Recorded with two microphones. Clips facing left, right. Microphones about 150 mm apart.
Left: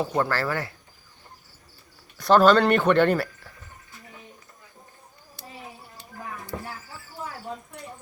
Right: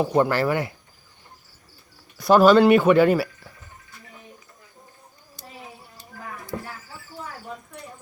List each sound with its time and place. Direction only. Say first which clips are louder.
0.0 s speech: right 5 dB; 15° right (ahead or behind)
2.1 s speech: right 3 dB; 10° right (ahead or behind)